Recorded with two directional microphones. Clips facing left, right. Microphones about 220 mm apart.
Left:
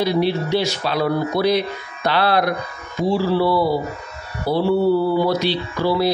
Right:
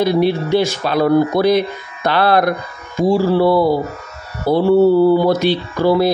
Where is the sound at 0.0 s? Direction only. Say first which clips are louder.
Right 4 dB; 50° right (ahead or behind).